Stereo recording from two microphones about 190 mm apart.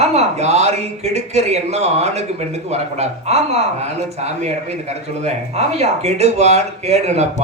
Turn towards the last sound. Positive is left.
turn(degrees=-35)  # may be behind; listen again after turning